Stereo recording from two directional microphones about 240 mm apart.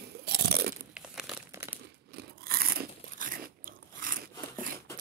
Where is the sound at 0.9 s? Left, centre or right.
Centre.